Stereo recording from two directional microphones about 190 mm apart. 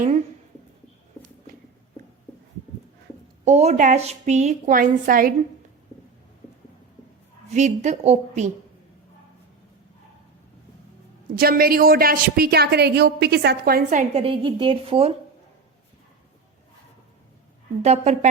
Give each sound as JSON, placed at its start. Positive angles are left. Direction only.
{"t": 3.4, "sound": "a woman's voice", "side_deg": -35}
{"t": 7.5, "sound": "a woman's voice", "side_deg": -35}
{"t": 11.3, "sound": "a woman's voice", "side_deg": -50}
{"t": 14.1, "sound": "a woman's voice", "side_deg": -30}
{"t": 17.8, "sound": "a woman's voice", "side_deg": -35}